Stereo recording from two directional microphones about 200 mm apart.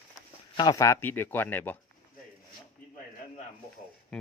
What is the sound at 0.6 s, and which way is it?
Speech, 20° left (ahead or behind).